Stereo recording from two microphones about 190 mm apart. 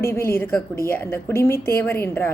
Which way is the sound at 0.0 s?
15° left (ahead or behind).